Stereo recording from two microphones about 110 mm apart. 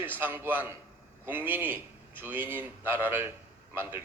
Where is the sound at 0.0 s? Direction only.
15° right (ahead or behind).